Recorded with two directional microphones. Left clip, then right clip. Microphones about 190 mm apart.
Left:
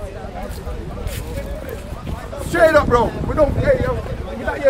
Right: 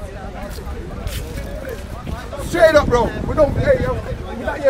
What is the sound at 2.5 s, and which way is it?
Speech, 10° left (ahead or behind).